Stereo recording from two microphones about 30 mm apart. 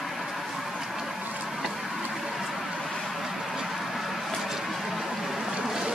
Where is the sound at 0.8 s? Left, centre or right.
Centre.